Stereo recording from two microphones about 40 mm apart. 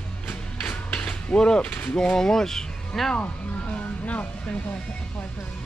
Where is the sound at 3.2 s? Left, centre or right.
Left.